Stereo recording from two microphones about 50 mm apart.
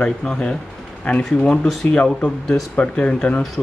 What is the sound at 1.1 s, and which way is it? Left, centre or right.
Speech, left.